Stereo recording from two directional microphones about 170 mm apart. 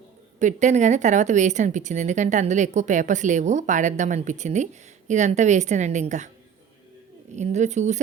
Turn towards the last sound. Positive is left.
turn(degrees=-45)  # may be behind; listen again after turning